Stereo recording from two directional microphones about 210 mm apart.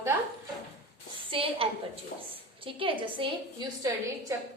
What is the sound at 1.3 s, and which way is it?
A woman's voice, 25° right (ahead or behind).